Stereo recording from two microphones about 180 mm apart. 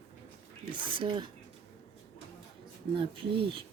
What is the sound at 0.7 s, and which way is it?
Speech, 25° right (ahead or behind).